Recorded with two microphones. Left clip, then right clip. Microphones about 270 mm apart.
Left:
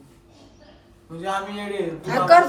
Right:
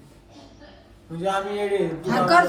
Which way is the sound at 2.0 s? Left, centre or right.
Left.